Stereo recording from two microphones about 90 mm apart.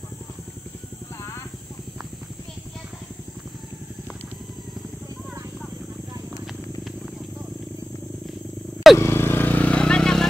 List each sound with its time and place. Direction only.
8.9 s vehicle: 30° left (ahead or behind); by 10.2 s 10° left (ahead or behind)